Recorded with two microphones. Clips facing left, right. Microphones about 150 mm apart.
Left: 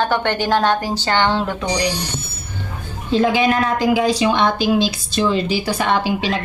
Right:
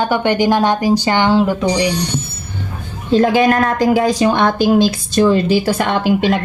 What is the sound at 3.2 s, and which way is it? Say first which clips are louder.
A woman's voice: right 4 dB; 50° right (ahead or behind).